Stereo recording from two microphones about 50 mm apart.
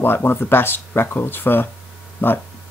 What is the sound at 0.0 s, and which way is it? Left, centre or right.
Speech, left.